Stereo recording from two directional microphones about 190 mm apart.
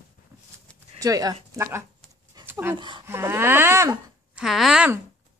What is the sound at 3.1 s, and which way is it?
Speech, 15° right (ahead or behind).